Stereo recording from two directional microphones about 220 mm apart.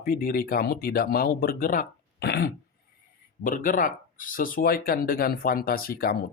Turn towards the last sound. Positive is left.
turn(degrees=40)  # may be behind; listen again after turning